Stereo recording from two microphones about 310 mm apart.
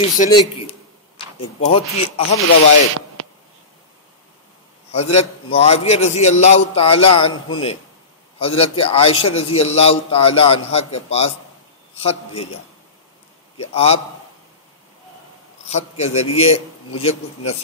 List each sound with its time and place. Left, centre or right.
0.2 s a man's voice: centre
4.9 s a man's voice: centre
13.6 s a man's voice: centre
15.6 s a man's voice: left